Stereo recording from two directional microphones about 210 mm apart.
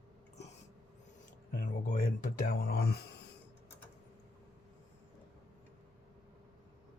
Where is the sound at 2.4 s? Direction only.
45° left (ahead or behind).